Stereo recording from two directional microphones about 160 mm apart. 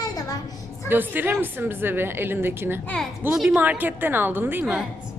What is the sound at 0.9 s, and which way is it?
A woman's voice, 10° right (ahead or behind).